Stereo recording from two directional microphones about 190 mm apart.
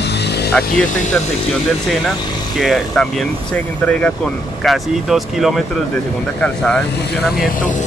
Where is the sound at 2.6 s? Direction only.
Centre (ahead or behind).